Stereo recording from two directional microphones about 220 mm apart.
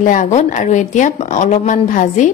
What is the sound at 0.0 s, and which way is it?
A woman's voice, 35° left (ahead or behind).